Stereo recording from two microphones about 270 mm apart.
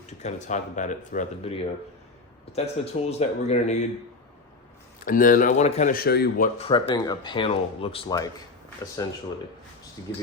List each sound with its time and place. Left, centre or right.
0.2 s speech: left
5.0 s a man's voice: left
6.7 s speech: centre